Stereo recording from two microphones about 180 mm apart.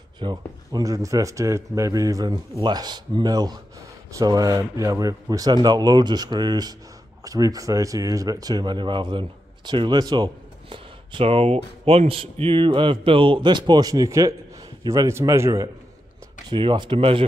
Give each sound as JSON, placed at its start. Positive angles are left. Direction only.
{"t": 0.2, "sound": "a man's voice", "side_deg": -25}